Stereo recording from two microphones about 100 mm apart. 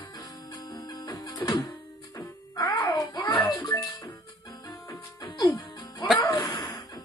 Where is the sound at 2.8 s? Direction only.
45° left (ahead or behind).